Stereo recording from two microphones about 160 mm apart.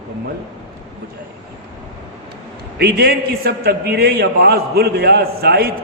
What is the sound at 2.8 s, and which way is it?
A man's voice, 75° right (ahead or behind).